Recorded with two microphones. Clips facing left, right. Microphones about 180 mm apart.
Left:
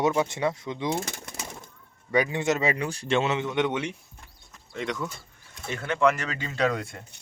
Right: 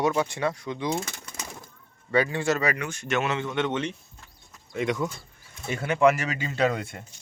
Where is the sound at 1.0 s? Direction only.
50° left (ahead or behind).